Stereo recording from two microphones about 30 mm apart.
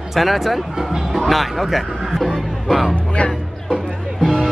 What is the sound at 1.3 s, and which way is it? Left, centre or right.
Music, centre.